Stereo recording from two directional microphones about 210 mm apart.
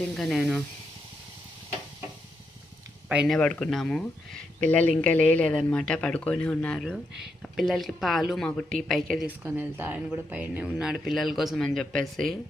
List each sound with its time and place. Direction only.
0.1 s a woman's voice: centre (ahead or behind)
3.1 s a woman's voice: centre (ahead or behind)